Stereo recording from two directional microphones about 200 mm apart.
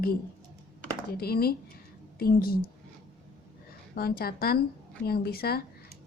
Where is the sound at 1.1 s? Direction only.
50° left (ahead or behind).